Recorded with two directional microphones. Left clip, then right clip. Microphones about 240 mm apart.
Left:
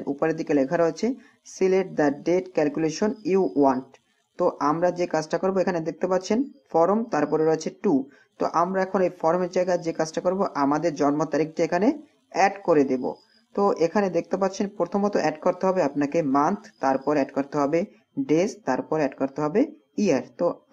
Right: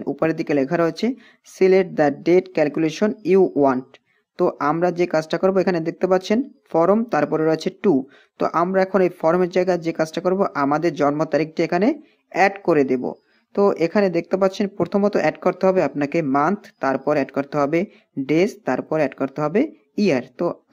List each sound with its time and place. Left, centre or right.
0.0 s speech: right